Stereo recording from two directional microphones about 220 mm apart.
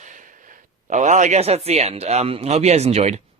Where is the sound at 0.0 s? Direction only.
35° right (ahead or behind).